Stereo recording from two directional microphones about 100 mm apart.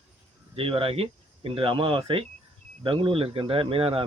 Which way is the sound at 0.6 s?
65° right (ahead or behind).